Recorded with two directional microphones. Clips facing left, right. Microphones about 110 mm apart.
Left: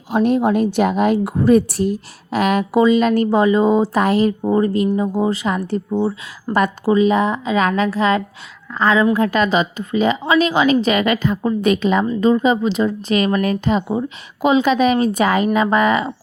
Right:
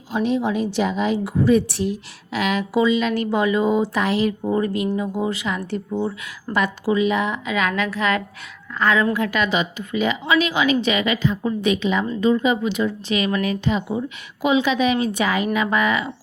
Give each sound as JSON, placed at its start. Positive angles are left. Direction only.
{"t": 0.1, "sound": "a woman's voice", "side_deg": 50}
{"t": 4.4, "sound": "a woman's voice", "side_deg": 30}
{"t": 5.9, "sound": "speech", "side_deg": 25}
{"t": 6.5, "sound": "a woman's voice", "side_deg": 45}